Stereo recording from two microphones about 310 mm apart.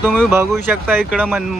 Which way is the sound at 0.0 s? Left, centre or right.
Centre.